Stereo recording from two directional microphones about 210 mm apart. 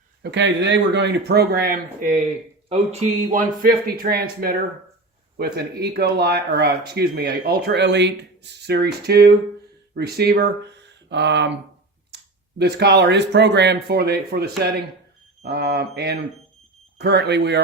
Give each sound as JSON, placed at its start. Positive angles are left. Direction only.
{"t": 0.2, "sound": "speech", "side_deg": -55}
{"t": 2.6, "sound": "speech", "side_deg": -30}
{"t": 3.3, "sound": "speech", "side_deg": -45}